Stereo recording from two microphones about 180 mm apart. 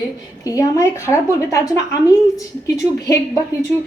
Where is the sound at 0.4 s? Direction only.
20° left (ahead or behind).